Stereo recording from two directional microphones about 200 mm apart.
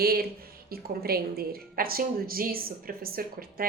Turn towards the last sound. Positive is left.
turn(degrees=-45)  # may be behind; listen again after turning